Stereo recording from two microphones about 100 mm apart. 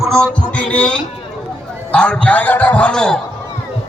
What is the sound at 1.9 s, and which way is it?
A man's voice, 10° left (ahead or behind).